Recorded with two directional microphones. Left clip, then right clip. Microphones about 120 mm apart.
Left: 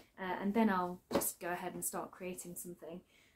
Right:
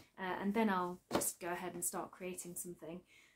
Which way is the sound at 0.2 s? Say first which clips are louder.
Left 2 dB; 30° right (ahead or behind).